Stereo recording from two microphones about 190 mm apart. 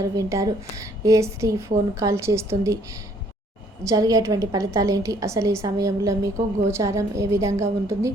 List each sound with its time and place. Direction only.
0.0 s a woman's voice: 15° right (ahead or behind)
3.8 s a woman's voice: 20° right (ahead or behind)